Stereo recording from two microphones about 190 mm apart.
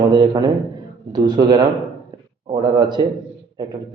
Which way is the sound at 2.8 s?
25° right (ahead or behind).